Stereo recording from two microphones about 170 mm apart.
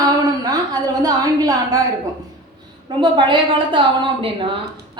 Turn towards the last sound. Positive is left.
turn(degrees=-30)  # may be behind; listen again after turning